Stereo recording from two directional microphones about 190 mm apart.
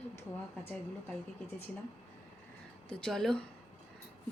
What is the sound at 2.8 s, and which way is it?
Speech, centre (ahead or behind).